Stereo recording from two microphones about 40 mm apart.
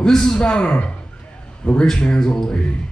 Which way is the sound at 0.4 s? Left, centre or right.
Left.